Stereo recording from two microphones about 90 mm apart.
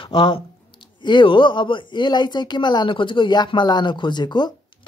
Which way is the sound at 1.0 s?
65° left (ahead or behind).